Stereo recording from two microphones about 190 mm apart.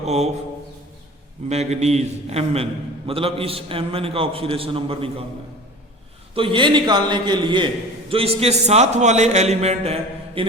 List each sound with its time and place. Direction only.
0.0 s a sound: 35° right (ahead or behind)
1.5 s a man's voice: 35° right (ahead or behind)
6.3 s a man's voice: 25° right (ahead or behind)